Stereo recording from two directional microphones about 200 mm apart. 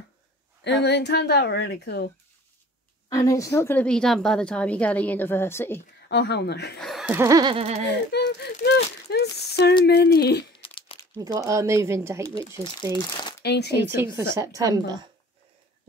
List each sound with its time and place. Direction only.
0.7 s a woman's voice: 60° left (ahead or behind)
3.1 s a woman's voice: 15° left (ahead or behind)
6.0 s a woman's voice: 60° left (ahead or behind)
6.8 s chuckle: centre (ahead or behind)
7.2 s a woman's voice: 15° right (ahead or behind)
8.1 s whimper: 55° left (ahead or behind)
8.6 s a sound: 55° left (ahead or behind)
10.6 s crumpling: 25° left (ahead or behind)
11.1 s speech: 15° right (ahead or behind)
13.0 s speech: 20° left (ahead or behind)
13.4 s speech: 55° left (ahead or behind)
13.8 s a woman's voice: 15° right (ahead or behind)